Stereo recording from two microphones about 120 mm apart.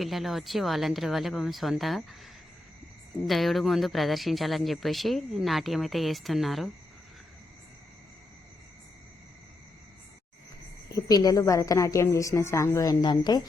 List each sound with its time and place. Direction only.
0.0 s speech: centre (ahead or behind)
3.2 s speech: centre (ahead or behind)
10.9 s a woman's voice: 30° left (ahead or behind)